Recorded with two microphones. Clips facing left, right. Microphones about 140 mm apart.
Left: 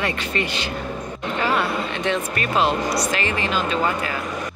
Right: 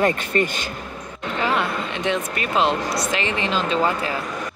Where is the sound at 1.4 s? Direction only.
20° right (ahead or behind).